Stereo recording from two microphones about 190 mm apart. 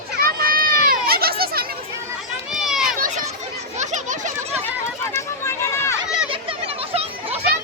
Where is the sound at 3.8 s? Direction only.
40° right (ahead or behind).